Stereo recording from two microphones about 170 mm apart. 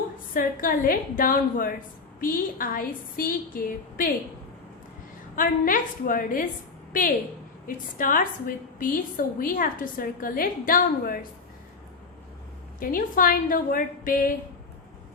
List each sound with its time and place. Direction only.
0.3 s a woman's voice: 55° left (ahead or behind)
5.4 s a woman's voice: 55° left (ahead or behind)
7.7 s a woman's voice: 55° left (ahead or behind)
12.8 s a woman's voice: 55° left (ahead or behind)